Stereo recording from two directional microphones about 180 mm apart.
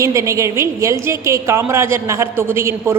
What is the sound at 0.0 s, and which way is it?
A woman's voice, 15° right (ahead or behind).